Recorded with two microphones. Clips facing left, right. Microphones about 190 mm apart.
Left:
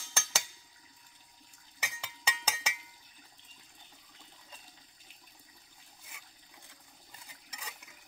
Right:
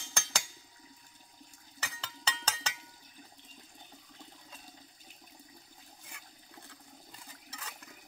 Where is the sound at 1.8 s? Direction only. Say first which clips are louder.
Even; 10° left (ahead or behind).